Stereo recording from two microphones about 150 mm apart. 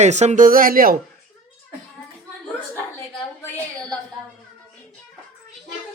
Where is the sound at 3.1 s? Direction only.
10° left (ahead or behind).